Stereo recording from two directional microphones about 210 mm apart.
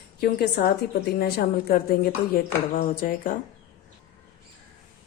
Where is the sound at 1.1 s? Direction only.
45° left (ahead or behind).